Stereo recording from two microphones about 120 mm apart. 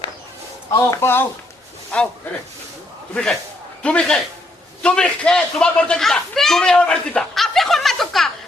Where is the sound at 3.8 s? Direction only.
10° left (ahead or behind).